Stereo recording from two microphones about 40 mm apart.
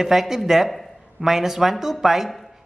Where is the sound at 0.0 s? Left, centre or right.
Centre.